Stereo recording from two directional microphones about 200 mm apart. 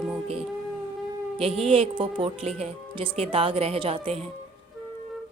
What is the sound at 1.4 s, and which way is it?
A woman's voice, 30° right (ahead or behind).